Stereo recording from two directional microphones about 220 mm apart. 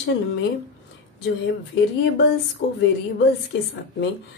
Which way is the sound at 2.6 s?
50° left (ahead or behind).